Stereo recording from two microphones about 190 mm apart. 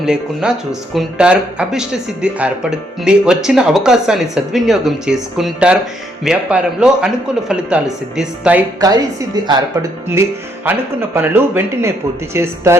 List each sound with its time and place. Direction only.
0.0 s speech: 5° right (ahead or behind)
8.8 s a woman's voice: 20° right (ahead or behind)
10.7 s speech: 10° right (ahead or behind)